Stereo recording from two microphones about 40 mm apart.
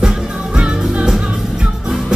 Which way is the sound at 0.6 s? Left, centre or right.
Right.